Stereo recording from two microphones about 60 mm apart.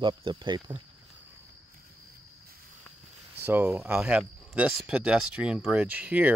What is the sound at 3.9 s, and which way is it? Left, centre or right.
Speech, centre.